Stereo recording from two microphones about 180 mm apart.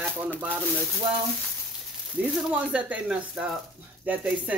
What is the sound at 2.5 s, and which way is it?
Speech, 5° right (ahead or behind).